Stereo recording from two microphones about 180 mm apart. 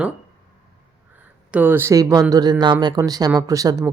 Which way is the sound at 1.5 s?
10° right (ahead or behind).